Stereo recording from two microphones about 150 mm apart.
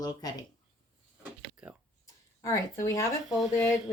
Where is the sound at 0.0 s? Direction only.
25° left (ahead or behind).